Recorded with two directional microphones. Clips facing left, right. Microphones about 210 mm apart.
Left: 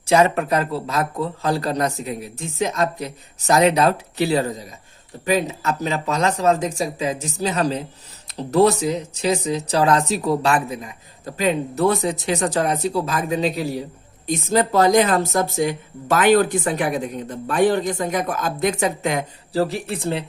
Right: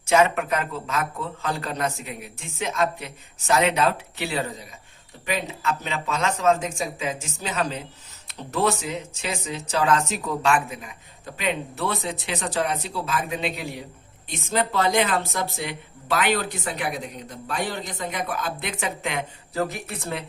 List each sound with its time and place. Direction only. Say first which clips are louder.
0.0 s speech: left 3 dB; 35° left (ahead or behind)